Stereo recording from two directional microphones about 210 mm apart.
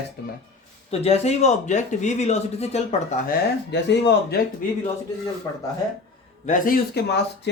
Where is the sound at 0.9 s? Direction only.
30° left (ahead or behind).